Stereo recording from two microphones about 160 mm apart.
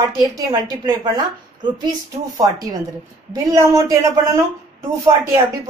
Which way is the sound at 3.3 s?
20° right (ahead or behind).